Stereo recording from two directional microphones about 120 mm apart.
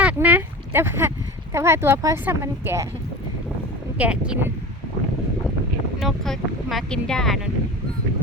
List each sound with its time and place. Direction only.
0.0 s a sound: 10° right (ahead or behind)
1.5 s speech: 20° right (ahead or behind)
3.9 s speech: 10° right (ahead or behind)
6.0 s speech: centre (ahead or behind)